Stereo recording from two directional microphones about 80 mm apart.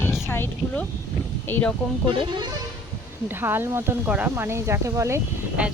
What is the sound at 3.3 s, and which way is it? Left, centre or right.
Speech, right.